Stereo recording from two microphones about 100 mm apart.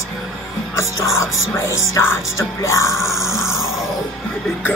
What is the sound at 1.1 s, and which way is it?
Music, 30° left (ahead or behind).